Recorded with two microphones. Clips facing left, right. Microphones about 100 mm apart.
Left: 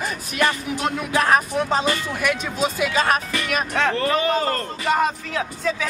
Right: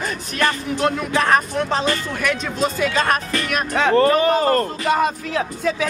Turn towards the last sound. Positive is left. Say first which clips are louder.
# right 3 dB
turn(degrees=-5)  # may be behind; listen again after turning